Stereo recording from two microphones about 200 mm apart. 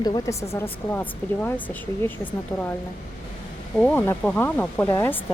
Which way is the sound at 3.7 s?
5° left (ahead or behind).